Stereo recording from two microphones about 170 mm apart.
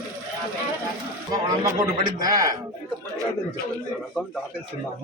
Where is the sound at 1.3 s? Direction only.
20° right (ahead or behind).